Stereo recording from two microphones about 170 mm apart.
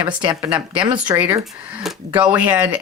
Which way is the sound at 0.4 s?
10° right (ahead or behind).